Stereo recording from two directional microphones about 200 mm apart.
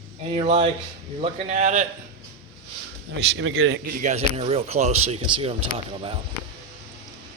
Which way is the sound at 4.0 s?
35° right (ahead or behind).